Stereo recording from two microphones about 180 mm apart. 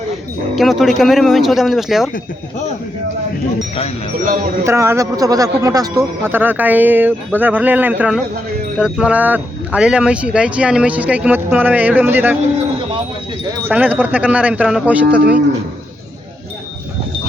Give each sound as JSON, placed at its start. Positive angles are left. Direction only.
{"t": 0.5, "sound": "speech", "side_deg": 0}
{"t": 4.6, "sound": "speech", "side_deg": -15}
{"t": 13.7, "sound": "speech", "side_deg": -10}